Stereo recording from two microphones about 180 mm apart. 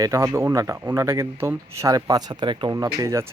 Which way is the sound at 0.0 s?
15° right (ahead or behind).